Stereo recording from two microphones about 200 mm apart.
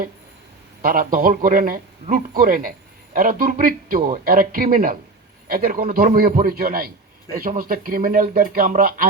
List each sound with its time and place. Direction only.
0.8 s a man's voice: 45° right (ahead or behind)